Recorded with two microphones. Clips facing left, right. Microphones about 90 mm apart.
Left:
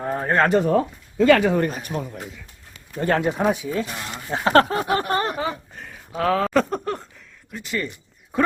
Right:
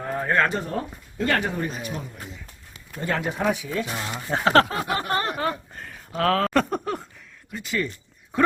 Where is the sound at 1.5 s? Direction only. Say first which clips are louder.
Left 6 dB; 55° left (ahead or behind).